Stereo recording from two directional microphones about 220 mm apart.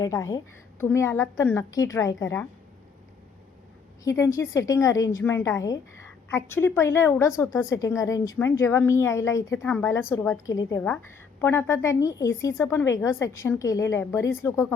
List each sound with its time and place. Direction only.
0.0 s a woman's voice: 15° left (ahead or behind)
4.0 s a woman's voice: 15° left (ahead or behind)